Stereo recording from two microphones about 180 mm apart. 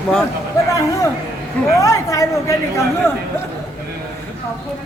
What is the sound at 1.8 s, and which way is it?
Speech, 15° left (ahead or behind).